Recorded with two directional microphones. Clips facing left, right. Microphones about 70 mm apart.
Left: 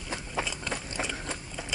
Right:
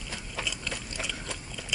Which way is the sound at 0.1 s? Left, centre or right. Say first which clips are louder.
Left 4 dB; left.